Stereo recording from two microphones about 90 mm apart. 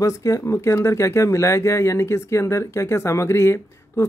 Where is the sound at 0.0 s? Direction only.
35° left (ahead or behind).